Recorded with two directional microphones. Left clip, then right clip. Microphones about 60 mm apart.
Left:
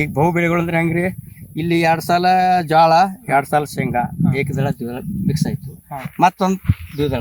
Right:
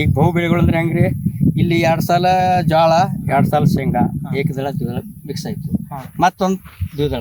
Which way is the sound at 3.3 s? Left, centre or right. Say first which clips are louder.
Even; right.